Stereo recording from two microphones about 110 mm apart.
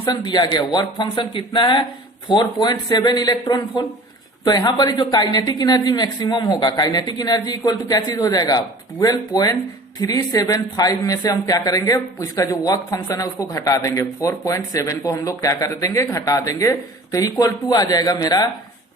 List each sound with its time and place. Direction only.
0.0 s speech: 40° left (ahead or behind)